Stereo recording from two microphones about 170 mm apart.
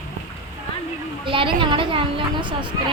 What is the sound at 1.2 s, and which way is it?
A woman's voice, 30° right (ahead or behind).